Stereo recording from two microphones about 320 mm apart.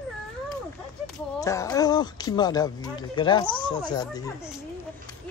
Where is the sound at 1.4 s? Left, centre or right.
Centre.